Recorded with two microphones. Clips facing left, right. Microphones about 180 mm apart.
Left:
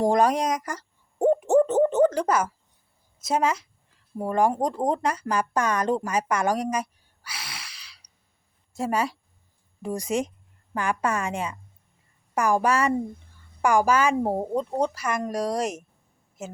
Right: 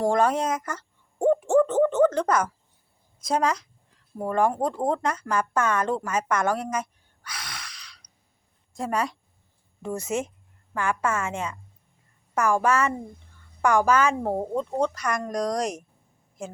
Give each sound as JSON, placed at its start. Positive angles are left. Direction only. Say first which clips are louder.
{"t": 0.0, "sound": "a woman's voice", "louder": "left 1 dB", "side_deg": 15}
{"t": 1.2, "sound": "owl", "louder": "left 1 dB", "side_deg": 15}
{"t": 3.2, "sound": "a woman's voice", "louder": "even", "side_deg": 5}
{"t": 7.8, "sound": "a sound", "louder": "right 2 dB", "side_deg": 5}
{"t": 8.7, "sound": "a woman's voice", "louder": "left 1 dB", "side_deg": 5}